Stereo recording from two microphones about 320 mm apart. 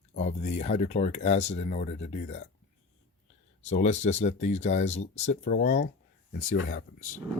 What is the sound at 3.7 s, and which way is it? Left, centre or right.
Speech, left.